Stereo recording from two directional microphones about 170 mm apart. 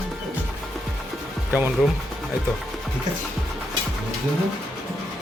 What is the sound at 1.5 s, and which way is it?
Speech, 10° right (ahead or behind).